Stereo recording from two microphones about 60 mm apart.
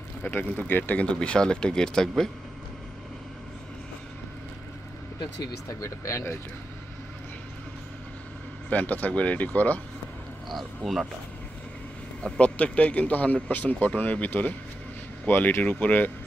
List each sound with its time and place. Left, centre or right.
0.2 s speech: left; by 2.3 s centre
5.7 s speech: left
8.6 s speech: left
10.5 s speech: centre
12.2 s speech: centre